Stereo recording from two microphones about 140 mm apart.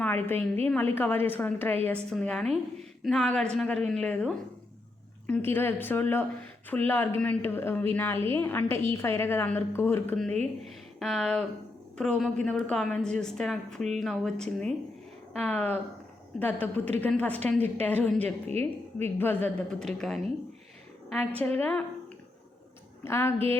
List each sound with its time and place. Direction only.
0.3 s a woman's voice: 15° left (ahead or behind)
11.0 s a woman's voice: 5° left (ahead or behind)
23.0 s a woman's voice: 15° left (ahead or behind)